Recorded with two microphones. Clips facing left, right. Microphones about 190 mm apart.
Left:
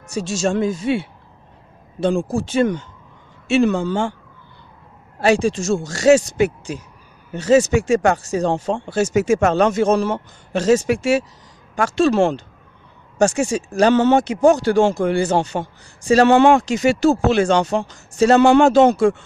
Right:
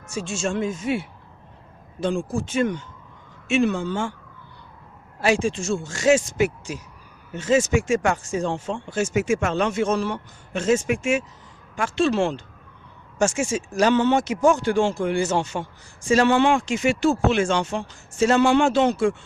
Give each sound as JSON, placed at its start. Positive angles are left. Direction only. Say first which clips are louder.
{"t": 0.3, "sound": "speech", "louder": "left 6 dB", "side_deg": 40}
{"t": 5.2, "sound": "speech", "louder": "left 5 dB", "side_deg": 35}
{"t": 7.3, "sound": "speech", "louder": "left 5 dB", "side_deg": 40}